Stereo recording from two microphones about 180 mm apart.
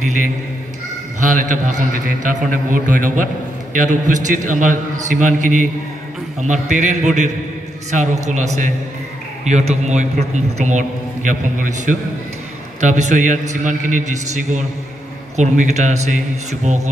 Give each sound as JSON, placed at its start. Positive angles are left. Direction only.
{"t": 0.0, "sound": "a man's voice", "side_deg": -45}
{"t": 1.3, "sound": "a man's voice", "side_deg": -45}